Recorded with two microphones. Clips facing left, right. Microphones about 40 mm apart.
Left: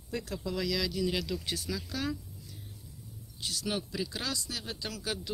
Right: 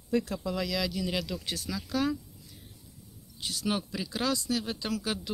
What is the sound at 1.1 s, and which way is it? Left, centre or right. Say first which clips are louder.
Speech: right 1 dB; centre.